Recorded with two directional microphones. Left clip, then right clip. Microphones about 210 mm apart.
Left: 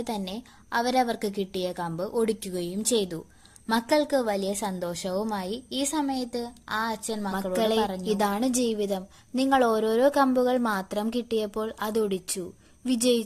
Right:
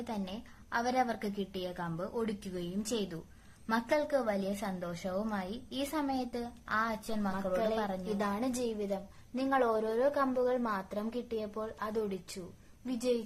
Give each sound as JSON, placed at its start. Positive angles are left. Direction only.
{"t": 0.0, "sound": "a woman's voice", "side_deg": 30}
{"t": 7.7, "sound": "a woman's voice", "side_deg": 30}